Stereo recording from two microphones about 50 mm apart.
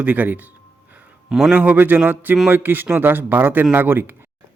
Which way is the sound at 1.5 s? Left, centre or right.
Right.